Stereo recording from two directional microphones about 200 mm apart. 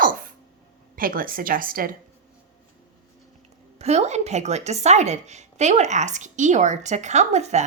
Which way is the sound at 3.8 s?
35° right (ahead or behind).